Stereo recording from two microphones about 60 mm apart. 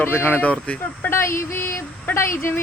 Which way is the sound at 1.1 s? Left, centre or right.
Left.